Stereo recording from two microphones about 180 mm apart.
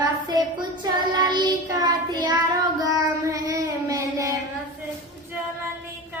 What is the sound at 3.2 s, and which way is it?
Child singing, 20° right (ahead or behind).